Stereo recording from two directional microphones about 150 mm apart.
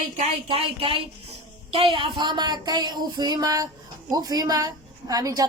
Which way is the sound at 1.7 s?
35° right (ahead or behind).